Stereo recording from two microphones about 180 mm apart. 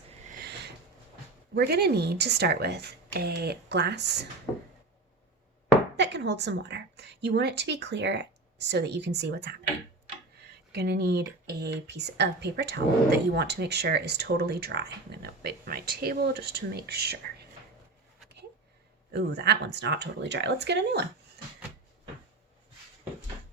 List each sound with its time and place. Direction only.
0.3 s a sound: 65° right (ahead or behind)
1.5 s speech: 60° right (ahead or behind)
6.0 s a woman's voice: 70° right (ahead or behind)
10.7 s speech: 65° right (ahead or behind)
19.1 s a woman's voice: 65° right (ahead or behind)